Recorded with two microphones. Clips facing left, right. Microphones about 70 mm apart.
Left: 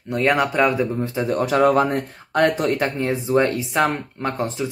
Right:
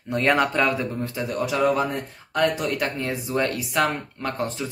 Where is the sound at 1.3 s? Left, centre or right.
Left.